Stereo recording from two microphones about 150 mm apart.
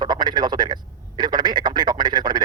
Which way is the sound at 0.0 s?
30° right (ahead or behind).